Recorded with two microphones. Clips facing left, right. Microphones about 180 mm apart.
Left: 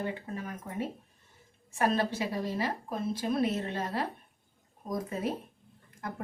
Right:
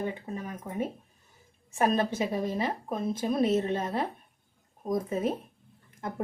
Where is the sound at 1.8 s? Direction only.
20° right (ahead or behind).